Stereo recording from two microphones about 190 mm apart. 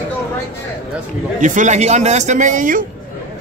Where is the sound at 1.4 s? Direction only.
40° right (ahead or behind).